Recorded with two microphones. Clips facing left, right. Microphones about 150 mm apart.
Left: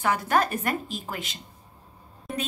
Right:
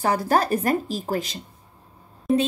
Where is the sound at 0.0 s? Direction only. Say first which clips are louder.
Right 3 dB; 35° right (ahead or behind).